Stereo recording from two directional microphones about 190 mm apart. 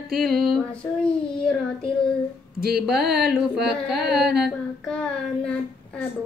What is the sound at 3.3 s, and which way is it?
Singing, 5° right (ahead or behind).